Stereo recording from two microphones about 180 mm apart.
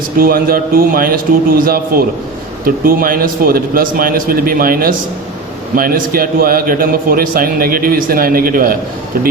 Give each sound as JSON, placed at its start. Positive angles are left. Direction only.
{"t": 0.2, "sound": "a man's voice", "side_deg": -55}